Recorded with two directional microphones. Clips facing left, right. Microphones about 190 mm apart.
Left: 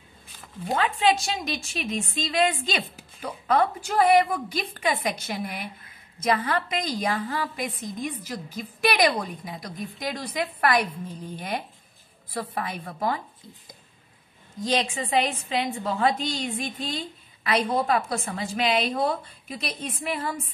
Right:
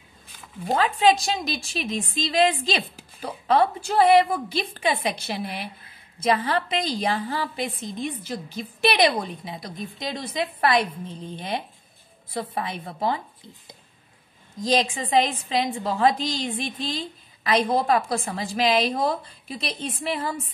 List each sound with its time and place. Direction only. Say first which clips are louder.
0.7 s a woman's voice: right 3 dB; 35° right (ahead or behind)
14.6 s a woman's voice: right 3 dB; 30° right (ahead or behind)